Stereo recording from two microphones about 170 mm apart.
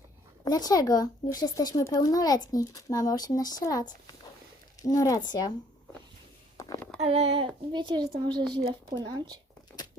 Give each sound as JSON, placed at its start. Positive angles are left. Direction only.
{"t": 0.4, "sound": "speech", "side_deg": 20}
{"t": 6.6, "sound": "a sound", "side_deg": 15}
{"t": 7.0, "sound": "a child's voice", "side_deg": -35}